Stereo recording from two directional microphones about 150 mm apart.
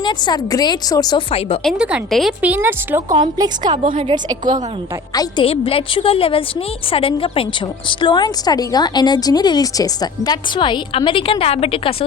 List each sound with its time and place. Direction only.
0.0 s speech: 30° left (ahead or behind)
1.3 s a woman's voice: 40° left (ahead or behind)
1.6 s a woman's voice: 5° right (ahead or behind)
2.4 s speech: 15° right (ahead or behind)
3.1 s speech: 25° right (ahead or behind)
3.9 s a woman's voice: 40° right (ahead or behind)
5.1 s speech: 25° left (ahead or behind)
5.5 s a woman's voice: 40° left (ahead or behind)